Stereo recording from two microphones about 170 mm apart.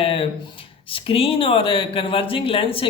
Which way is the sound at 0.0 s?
35° left (ahead or behind).